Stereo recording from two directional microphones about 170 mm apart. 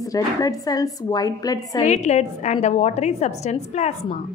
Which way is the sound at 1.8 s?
45° left (ahead or behind).